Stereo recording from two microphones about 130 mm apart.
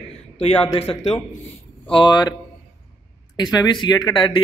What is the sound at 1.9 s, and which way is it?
Speech, 35° left (ahead or behind).